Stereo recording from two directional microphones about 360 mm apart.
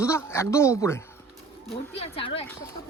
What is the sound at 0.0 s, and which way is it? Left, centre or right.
Speech, centre.